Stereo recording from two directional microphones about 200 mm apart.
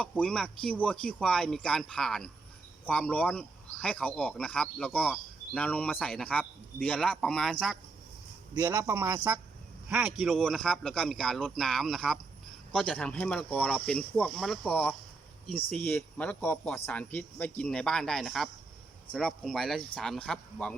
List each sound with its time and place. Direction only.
0.0 s speech: 5° left (ahead or behind)
8.5 s speech: 10° right (ahead or behind)